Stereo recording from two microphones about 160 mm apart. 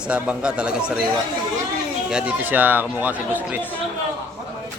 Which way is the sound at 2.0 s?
5° right (ahead or behind).